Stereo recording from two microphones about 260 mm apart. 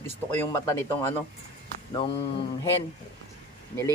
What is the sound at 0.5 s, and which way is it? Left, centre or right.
Speech, centre.